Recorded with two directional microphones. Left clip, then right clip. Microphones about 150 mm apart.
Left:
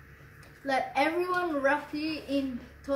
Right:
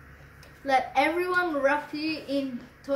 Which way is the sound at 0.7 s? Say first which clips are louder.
Right 4 dB; 20° right (ahead or behind).